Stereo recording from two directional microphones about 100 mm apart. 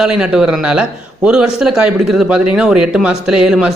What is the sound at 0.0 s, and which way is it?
A man's voice, 10° right (ahead or behind).